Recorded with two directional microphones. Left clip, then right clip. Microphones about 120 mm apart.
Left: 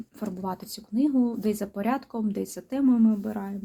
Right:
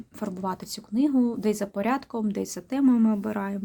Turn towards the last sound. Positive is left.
turn(degrees=-85)